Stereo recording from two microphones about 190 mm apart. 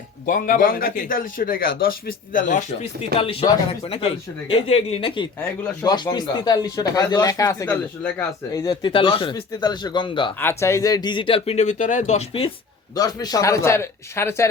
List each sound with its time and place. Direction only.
0.3 s a man's voice: 45° left (ahead or behind)
3.2 s speech: 30° left (ahead or behind)
10.4 s speech: 15° left (ahead or behind); by 12.5 s 30° left (ahead or behind)
13.0 s speech: 20° left (ahead or behind)